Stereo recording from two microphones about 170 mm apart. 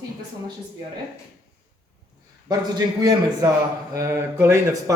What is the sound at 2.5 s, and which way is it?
Speech, 25° right (ahead or behind).